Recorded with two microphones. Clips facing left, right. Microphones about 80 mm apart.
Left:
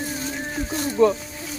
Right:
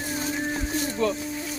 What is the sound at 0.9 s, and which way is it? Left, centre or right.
Speech, centre.